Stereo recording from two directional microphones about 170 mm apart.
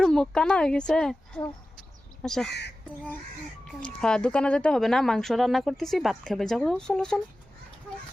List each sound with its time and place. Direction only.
0.0 s speech: 5° left (ahead or behind)
2.5 s speech: 80° left
3.7 s speech: 5° left (ahead or behind)